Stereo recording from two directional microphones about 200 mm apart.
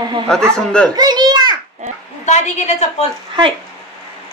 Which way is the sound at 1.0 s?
20° right (ahead or behind).